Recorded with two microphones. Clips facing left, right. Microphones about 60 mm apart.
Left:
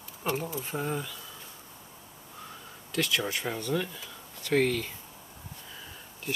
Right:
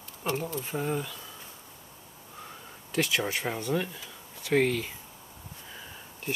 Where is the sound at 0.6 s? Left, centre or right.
Centre.